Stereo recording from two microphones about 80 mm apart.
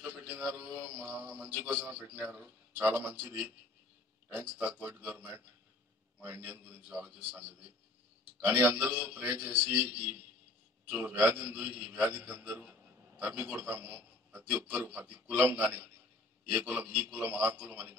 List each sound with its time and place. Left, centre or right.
0.0 s a man's voice: centre
8.5 s a man's voice: right
10.9 s a man's voice: centre